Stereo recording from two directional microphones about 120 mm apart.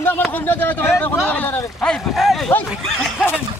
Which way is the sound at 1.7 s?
5° left (ahead or behind).